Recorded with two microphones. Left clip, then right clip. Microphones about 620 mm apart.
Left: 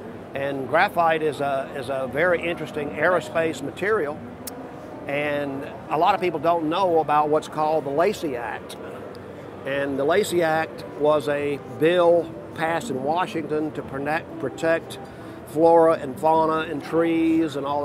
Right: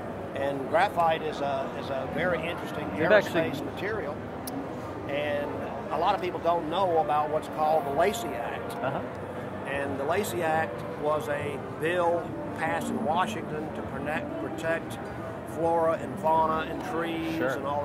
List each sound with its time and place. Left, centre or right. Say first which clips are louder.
0.4 s speech: left 4 dB; left
5.1 s speech: left 5 dB; left
9.7 s speech: left 7 dB; left